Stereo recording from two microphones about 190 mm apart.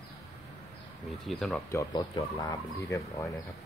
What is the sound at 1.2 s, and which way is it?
Speech, centre (ahead or behind).